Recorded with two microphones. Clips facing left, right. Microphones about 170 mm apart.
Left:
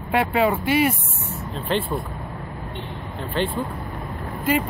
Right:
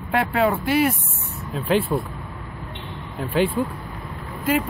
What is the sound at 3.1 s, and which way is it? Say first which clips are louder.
Speech: right 4 dB; 5° right (ahead or behind).